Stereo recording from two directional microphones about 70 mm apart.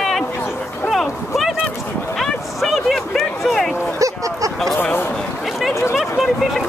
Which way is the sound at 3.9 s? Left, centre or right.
Right.